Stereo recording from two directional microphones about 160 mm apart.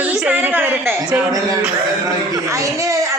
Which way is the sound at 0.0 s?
10° right (ahead or behind).